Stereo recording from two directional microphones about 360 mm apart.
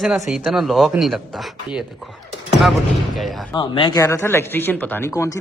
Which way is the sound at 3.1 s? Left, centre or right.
Centre.